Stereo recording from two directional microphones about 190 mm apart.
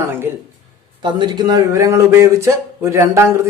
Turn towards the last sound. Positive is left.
turn(degrees=-15)  # may be behind; listen again after turning